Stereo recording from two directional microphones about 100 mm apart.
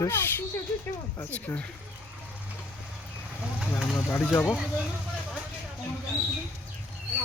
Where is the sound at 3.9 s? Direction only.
25° left (ahead or behind).